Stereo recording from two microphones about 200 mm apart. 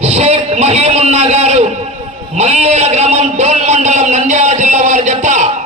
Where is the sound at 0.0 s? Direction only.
30° right (ahead or behind).